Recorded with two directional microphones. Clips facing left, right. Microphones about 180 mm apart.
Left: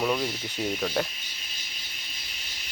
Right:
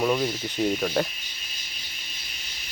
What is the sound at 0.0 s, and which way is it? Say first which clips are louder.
Speech: right 3 dB; 5° right (ahead or behind).